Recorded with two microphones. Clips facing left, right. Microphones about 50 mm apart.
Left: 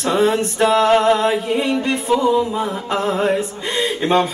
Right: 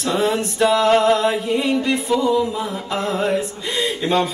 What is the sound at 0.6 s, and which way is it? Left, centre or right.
Music, centre.